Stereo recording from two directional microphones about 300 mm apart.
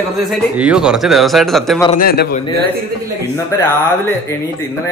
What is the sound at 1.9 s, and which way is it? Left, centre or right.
Speech, left.